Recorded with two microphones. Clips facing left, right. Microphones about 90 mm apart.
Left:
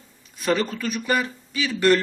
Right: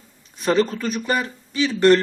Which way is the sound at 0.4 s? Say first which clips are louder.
Right 4 dB; 35° right (ahead or behind).